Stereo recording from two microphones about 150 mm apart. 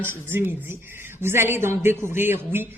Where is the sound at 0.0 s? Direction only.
15° right (ahead or behind).